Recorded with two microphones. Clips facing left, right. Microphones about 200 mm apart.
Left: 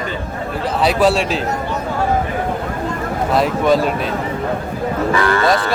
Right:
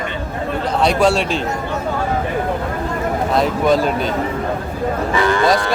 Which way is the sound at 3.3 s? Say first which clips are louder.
Left 1 dB; centre (ahead or behind).